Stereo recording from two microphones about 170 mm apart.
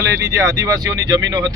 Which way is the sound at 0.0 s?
20° right (ahead or behind).